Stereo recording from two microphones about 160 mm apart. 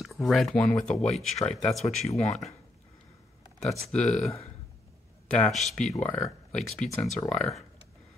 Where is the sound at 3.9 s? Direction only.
5° left (ahead or behind).